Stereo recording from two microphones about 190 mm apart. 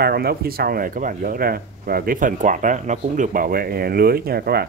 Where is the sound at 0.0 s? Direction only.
55° right (ahead or behind).